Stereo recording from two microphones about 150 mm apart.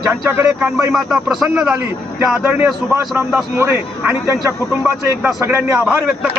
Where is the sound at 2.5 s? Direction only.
15° right (ahead or behind).